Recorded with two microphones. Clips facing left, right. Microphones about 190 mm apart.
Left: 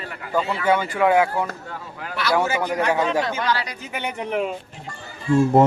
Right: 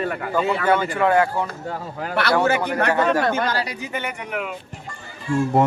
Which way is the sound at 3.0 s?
55° right (ahead or behind).